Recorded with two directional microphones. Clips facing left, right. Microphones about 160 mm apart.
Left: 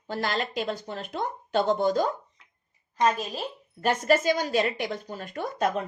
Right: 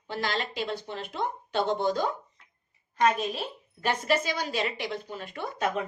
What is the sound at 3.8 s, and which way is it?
Speech, 45° left (ahead or behind).